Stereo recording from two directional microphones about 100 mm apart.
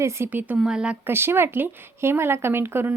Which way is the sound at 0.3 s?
15° right (ahead or behind).